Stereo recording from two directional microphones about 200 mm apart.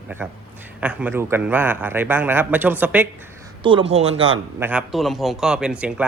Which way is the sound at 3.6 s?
25° right (ahead or behind).